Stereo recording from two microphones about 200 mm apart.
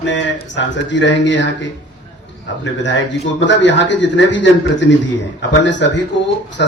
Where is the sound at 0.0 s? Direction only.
65° left (ahead or behind).